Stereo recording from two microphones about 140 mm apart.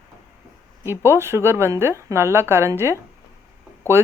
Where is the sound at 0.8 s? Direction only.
15° right (ahead or behind).